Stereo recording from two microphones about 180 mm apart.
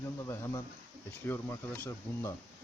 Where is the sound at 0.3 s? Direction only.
15° left (ahead or behind).